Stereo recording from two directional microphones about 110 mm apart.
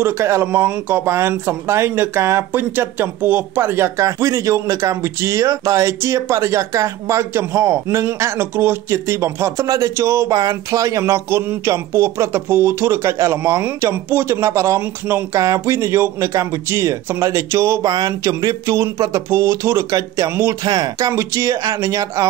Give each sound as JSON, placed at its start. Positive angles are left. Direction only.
{"t": 0.0, "sound": "speech", "side_deg": -25}
{"t": 17.8, "sound": "speech", "side_deg": -40}
{"t": 21.1, "sound": "speech", "side_deg": -25}